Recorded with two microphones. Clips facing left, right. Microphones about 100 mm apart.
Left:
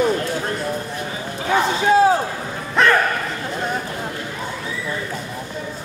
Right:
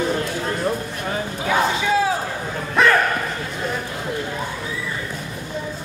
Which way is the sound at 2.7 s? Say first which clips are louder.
Even; centre (ahead or behind).